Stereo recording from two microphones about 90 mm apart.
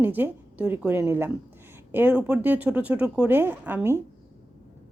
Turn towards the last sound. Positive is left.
turn(degrees=-25)  # may be behind; listen again after turning